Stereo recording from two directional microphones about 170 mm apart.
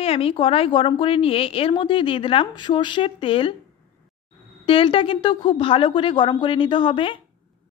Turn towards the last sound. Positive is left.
turn(degrees=30)  # may be behind; listen again after turning